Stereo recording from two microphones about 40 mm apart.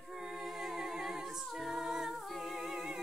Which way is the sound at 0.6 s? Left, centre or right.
Centre.